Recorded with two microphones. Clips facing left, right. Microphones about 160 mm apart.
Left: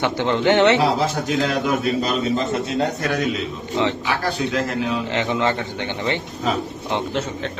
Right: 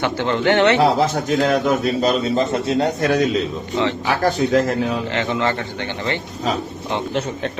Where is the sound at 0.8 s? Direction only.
45° right (ahead or behind).